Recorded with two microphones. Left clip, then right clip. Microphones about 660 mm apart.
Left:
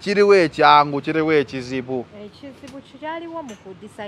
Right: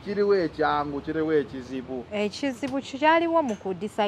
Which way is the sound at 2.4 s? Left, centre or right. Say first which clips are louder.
Right 9 dB; right.